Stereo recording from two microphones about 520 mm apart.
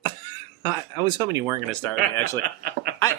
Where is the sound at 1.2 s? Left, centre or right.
Centre.